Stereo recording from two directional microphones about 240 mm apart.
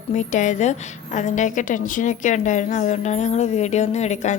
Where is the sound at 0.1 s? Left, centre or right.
Left.